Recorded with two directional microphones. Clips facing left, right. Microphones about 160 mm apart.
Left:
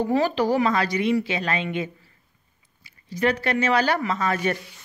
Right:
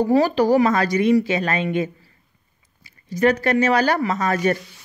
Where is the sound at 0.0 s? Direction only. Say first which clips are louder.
Right 5 dB; 40° right (ahead or behind).